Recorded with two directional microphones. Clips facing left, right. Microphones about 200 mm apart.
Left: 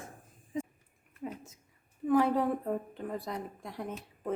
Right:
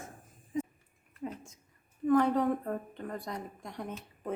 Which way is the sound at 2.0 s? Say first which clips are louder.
Right 1 dB; 5° left (ahead or behind).